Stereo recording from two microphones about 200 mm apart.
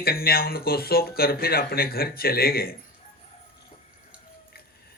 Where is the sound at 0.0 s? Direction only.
50° left (ahead or behind).